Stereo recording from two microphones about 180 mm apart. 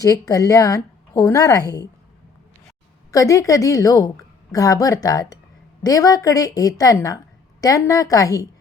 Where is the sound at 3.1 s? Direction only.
15° left (ahead or behind).